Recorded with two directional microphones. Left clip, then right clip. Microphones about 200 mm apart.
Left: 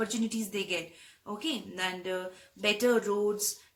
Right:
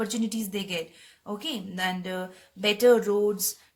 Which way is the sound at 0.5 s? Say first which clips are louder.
Right 1 dB; 50° right (ahead or behind).